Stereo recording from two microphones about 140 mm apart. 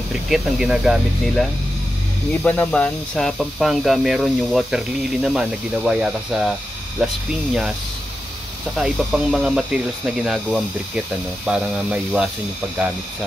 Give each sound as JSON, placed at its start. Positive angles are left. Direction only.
{"t": 0.3, "sound": "speech", "side_deg": 0}
{"t": 8.7, "sound": "speech", "side_deg": -5}